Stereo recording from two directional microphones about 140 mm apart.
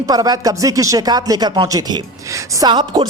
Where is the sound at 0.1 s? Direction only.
25° right (ahead or behind).